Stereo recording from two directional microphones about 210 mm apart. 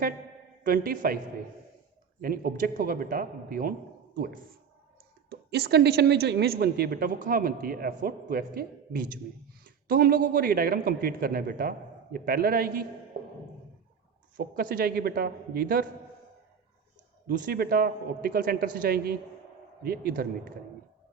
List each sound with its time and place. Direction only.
0.6 s a woman's voice: 45° right (ahead or behind)
2.2 s a woman's voice: 45° right (ahead or behind)
5.3 s a woman's voice: 50° right (ahead or behind)
14.3 s a woman's voice: 40° right (ahead or behind)
17.2 s a woman's voice: 40° right (ahead or behind)